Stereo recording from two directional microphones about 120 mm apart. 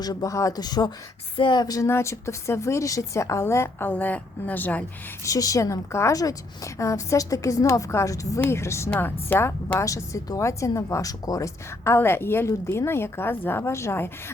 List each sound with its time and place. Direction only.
0.0 s a woman's voice: 30° left (ahead or behind); by 4.9 s 15° left (ahead or behind)
5.2 s a woman's voice: 30° left (ahead or behind)